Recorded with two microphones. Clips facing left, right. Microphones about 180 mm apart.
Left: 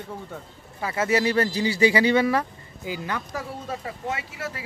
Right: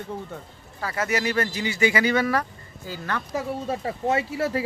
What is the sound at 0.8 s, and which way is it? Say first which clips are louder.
Speech: left 3 dB; 25° left (ahead or behind).